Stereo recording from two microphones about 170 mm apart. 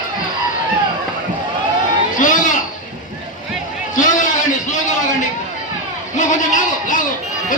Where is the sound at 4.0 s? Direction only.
45° left (ahead or behind).